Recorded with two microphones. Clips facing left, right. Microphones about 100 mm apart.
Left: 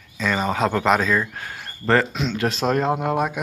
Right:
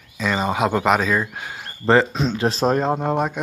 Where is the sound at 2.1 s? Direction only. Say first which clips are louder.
Right 2 dB; 35° right (ahead or behind).